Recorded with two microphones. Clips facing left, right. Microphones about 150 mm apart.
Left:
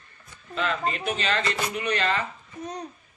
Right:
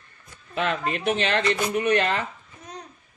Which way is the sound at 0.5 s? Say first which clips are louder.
Right 2 dB; 60° right (ahead or behind).